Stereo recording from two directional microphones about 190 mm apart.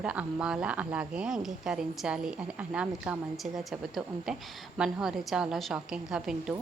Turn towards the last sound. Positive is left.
turn(degrees=-5)  # may be behind; listen again after turning